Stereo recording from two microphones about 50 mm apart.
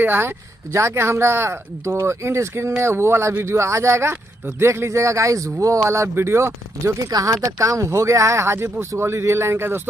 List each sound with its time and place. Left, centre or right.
0.0 s speech: right
0.7 s speech: right
2.8 s speech: right